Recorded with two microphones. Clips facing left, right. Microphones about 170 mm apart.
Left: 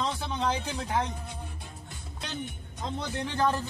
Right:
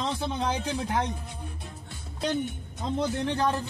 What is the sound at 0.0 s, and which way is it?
Speech, 15° right (ahead or behind).